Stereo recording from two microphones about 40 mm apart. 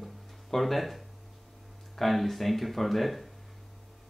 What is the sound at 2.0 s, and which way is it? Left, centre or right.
Speech, centre.